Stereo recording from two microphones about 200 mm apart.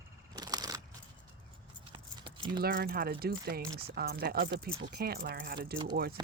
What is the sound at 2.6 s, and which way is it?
Speech, 50° right (ahead or behind).